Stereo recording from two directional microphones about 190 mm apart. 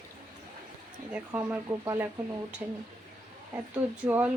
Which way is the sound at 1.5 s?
10° right (ahead or behind).